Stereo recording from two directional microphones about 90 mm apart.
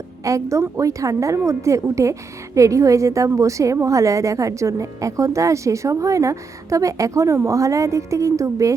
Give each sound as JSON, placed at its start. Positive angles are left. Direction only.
{"t": 0.3, "sound": "a woman's voice", "side_deg": -35}